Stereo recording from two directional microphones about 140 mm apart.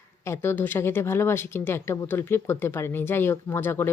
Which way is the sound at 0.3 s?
15° left (ahead or behind).